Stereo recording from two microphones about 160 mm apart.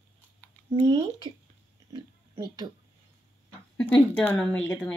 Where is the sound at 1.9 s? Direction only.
25° right (ahead or behind).